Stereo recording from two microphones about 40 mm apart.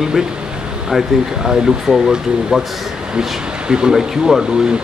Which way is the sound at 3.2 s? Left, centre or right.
Centre.